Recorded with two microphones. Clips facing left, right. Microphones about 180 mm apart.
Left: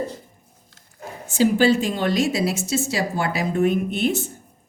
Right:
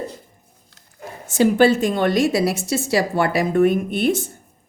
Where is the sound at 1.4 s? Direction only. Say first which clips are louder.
Right 2 dB; 55° right (ahead or behind).